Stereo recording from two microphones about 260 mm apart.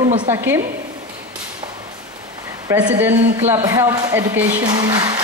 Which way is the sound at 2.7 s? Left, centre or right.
Centre.